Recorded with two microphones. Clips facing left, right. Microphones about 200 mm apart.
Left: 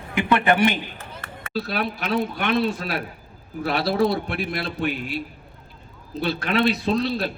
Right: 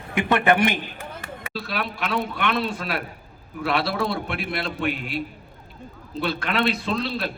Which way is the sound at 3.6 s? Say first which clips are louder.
Left 3 dB; 40° left (ahead or behind).